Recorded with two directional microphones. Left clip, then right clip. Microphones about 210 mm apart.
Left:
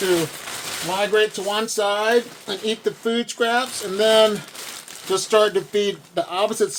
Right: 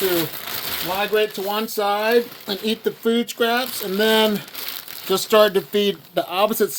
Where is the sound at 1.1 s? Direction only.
30° right (ahead or behind).